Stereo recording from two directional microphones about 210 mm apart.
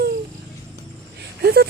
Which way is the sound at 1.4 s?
50° right (ahead or behind).